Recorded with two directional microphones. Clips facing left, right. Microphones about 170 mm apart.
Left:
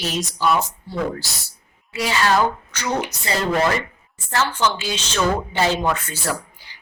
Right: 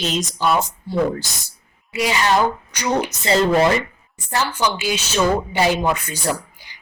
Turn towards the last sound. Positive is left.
turn(degrees=-15)  # may be behind; listen again after turning